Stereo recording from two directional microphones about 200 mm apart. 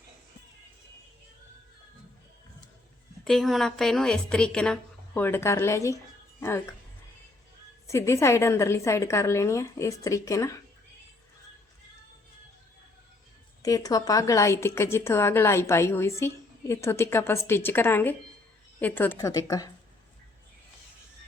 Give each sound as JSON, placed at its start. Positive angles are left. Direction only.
{"t": 3.2, "sound": "a woman's voice", "side_deg": 0}
{"t": 7.9, "sound": "a woman's voice", "side_deg": 15}
{"t": 13.6, "sound": "a woman's voice", "side_deg": 20}